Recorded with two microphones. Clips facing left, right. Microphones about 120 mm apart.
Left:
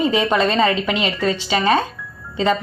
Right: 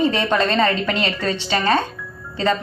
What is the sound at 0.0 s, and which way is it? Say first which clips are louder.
A woman's voice: left 1 dB; 10° left (ahead or behind).